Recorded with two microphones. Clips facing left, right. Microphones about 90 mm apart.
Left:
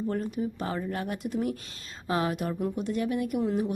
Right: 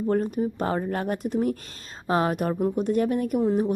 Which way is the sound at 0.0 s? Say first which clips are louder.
Right 6 dB; 45° right (ahead or behind).